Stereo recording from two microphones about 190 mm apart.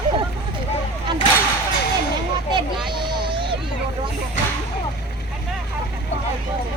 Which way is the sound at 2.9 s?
25° right (ahead or behind).